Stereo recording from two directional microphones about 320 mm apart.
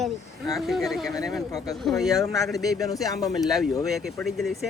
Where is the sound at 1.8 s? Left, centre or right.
Centre.